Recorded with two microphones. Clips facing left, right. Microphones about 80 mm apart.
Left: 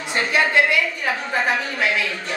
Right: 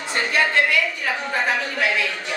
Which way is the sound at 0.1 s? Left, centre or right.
Centre.